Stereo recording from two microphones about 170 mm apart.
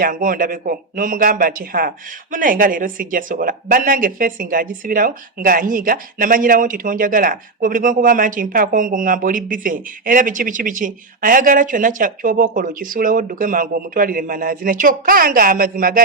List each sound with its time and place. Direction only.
0.0 s speech: 55° right (ahead or behind)